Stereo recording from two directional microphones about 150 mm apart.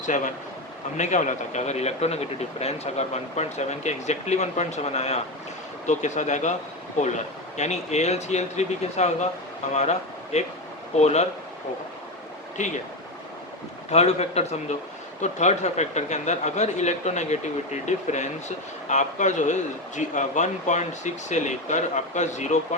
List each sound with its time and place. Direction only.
0.0 s a man's voice: 55° left (ahead or behind)
10.3 s speech: 50° left (ahead or behind)
12.6 s speech: 55° left (ahead or behind)
13.9 s speech: 45° left (ahead or behind)